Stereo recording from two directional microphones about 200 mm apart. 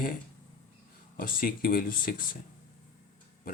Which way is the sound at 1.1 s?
45° left (ahead or behind).